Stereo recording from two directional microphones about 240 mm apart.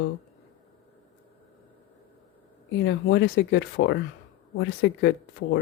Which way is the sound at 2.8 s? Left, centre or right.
Left.